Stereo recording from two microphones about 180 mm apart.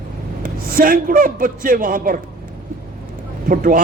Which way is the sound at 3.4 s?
50° right (ahead or behind).